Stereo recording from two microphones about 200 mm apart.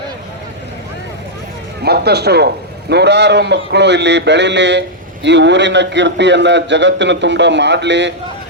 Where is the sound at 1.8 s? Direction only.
55° right (ahead or behind).